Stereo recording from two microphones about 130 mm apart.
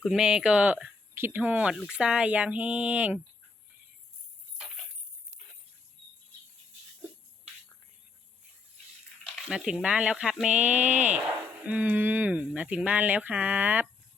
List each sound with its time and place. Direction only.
0.0 s speech: 5° right (ahead or behind)
9.2 s speech: centre (ahead or behind)